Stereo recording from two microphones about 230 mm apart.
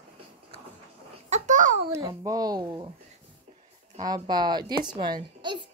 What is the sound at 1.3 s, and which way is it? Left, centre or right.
Babbling, right.